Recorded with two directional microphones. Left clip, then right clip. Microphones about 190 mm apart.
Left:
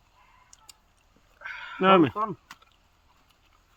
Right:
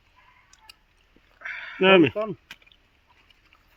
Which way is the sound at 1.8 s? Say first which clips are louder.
Right 2 dB; 5° left (ahead or behind).